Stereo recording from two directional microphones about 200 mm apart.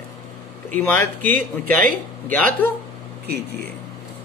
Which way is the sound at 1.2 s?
40° right (ahead or behind).